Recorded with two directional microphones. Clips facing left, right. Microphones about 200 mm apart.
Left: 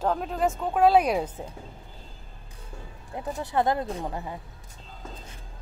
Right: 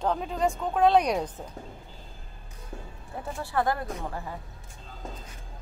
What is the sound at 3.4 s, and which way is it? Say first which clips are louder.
Speech: left 2 dB; 20° left (ahead or behind).